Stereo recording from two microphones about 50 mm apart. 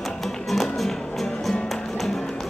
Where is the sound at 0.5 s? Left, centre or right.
Centre.